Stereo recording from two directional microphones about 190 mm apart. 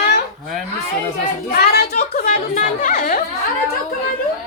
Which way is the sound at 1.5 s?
55° left (ahead or behind).